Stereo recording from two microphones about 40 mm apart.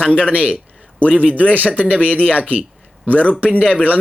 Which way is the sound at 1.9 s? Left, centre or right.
Left.